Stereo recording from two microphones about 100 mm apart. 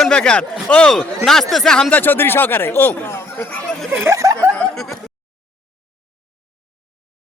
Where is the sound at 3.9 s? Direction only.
30° right (ahead or behind).